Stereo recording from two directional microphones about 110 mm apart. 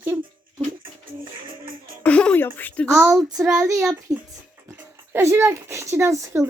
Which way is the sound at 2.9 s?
Centre (ahead or behind).